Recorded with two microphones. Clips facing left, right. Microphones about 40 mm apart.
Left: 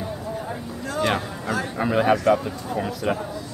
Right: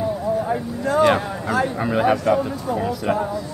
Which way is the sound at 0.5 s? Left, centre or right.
Right.